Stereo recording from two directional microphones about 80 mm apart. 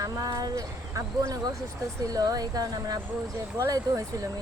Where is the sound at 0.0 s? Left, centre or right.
Right.